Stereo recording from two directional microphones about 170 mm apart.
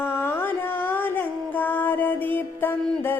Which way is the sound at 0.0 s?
15° left (ahead or behind).